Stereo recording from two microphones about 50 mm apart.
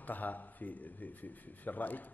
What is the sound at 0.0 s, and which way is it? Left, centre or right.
Speech, left.